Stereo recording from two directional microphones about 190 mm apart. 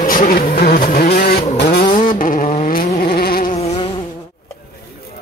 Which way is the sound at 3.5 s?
35° left (ahead or behind).